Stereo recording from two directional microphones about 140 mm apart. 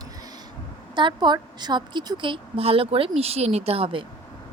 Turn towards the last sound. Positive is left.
turn(degrees=-40)  # may be behind; listen again after turning